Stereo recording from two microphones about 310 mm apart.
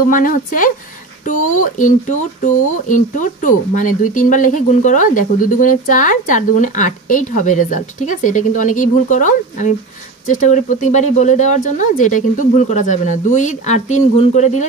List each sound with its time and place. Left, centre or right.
0.1 s speech: left